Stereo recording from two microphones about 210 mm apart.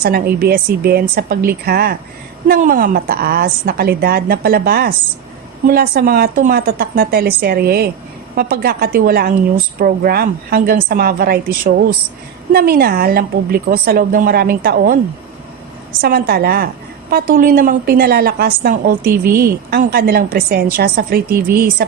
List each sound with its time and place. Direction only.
0.0 s a woman's voice: 45° right (ahead or behind)
16.0 s a woman's voice: 45° right (ahead or behind)